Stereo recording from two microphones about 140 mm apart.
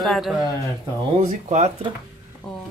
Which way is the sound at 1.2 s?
55° right (ahead or behind).